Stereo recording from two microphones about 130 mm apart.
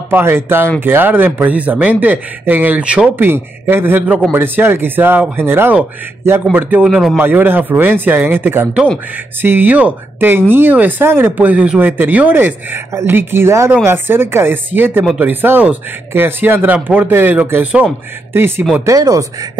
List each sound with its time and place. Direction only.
0.1 s speech: 15° right (ahead or behind)
7.2 s speech: 15° right (ahead or behind)